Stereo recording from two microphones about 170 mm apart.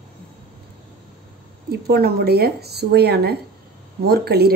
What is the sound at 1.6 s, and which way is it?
Speech, 65° right (ahead or behind).